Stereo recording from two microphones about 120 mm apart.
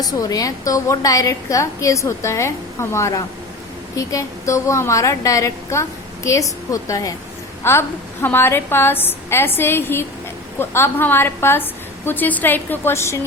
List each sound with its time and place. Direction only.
0.0 s a woman's voice: 30° left (ahead or behind)